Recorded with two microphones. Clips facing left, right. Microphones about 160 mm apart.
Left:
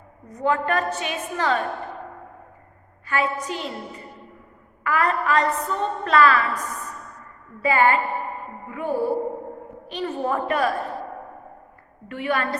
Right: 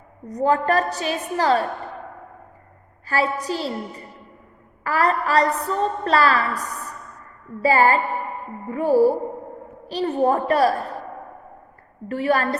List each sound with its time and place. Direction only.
0.3 s a woman's voice: 35° right (ahead or behind)
3.1 s a woman's voice: 35° right (ahead or behind)
4.8 s a woman's voice: 35° right (ahead or behind)
12.0 s a woman's voice: 35° right (ahead or behind)